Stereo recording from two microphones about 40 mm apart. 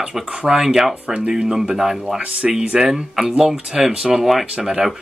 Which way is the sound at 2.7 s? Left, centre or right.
Centre.